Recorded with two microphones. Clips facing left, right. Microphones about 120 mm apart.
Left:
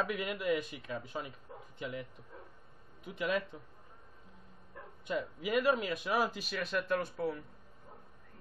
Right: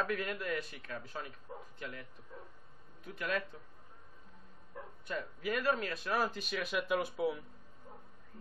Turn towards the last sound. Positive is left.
turn(degrees=-5)  # may be behind; listen again after turning